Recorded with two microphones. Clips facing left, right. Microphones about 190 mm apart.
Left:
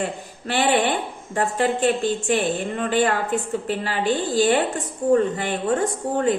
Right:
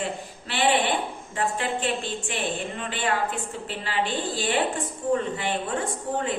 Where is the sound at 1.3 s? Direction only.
45° left (ahead or behind).